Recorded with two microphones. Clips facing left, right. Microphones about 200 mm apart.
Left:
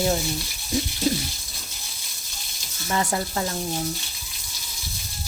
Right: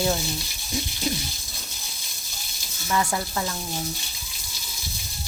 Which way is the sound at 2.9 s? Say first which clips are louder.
Left 1 dB; 30° left (ahead or behind).